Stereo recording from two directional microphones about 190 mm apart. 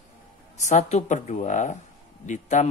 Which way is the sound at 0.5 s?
40° left (ahead or behind).